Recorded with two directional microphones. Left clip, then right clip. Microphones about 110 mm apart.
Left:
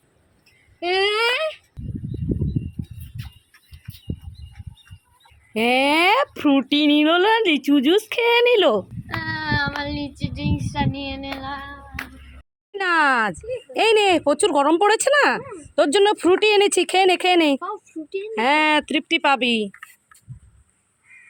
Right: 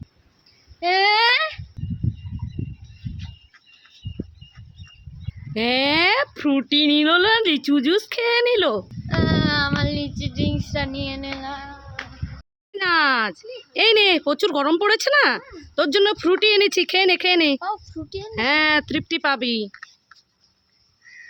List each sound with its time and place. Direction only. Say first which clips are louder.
0.8 s child singing: right 2 dB; 20° right (ahead or behind)
1.1 s a sound: right 3 dB; 35° right (ahead or behind)
5.5 s speech: left 2 dB; 20° left (ahead or behind)
6.9 s speech: left 1 dB; 5° left (ahead or behind); by 8.8 s 20° left (ahead or behind)
9.0 s child singing: right 3 dB; 25° right (ahead or behind)
12.7 s speech: even; centre (ahead or behind)
17.6 s a sound: right 2 dB; 50° right (ahead or behind)
18.3 s speech: left 1 dB; centre (ahead or behind)